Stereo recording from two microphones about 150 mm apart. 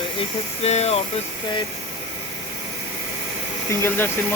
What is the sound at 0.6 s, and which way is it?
Speech, 45° left (ahead or behind).